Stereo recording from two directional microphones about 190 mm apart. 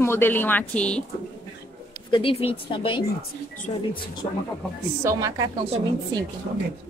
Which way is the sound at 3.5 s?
45° left (ahead or behind).